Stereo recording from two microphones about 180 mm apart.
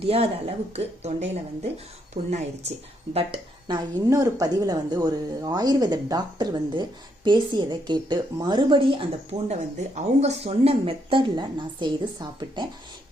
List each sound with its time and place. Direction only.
0.0 s a woman's voice: 35° right (ahead or behind)
9.5 s speech: 40° right (ahead or behind)